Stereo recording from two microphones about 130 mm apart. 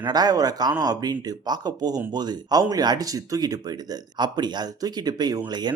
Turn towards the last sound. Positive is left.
turn(degrees=-35)  # may be behind; listen again after turning